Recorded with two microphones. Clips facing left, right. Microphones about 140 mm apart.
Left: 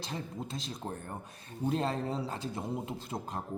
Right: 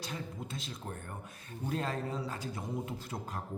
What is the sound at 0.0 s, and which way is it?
A man's voice, 30° left (ahead or behind).